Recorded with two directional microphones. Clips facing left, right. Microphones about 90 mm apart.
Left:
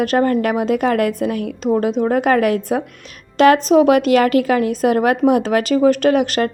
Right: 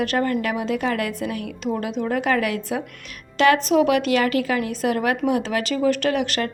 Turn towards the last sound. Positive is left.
turn(degrees=45)  # may be behind; listen again after turning